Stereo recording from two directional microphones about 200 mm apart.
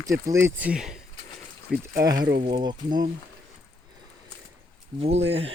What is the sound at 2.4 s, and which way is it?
Speech, 25° right (ahead or behind).